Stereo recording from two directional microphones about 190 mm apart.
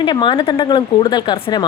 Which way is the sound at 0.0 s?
25° left (ahead or behind).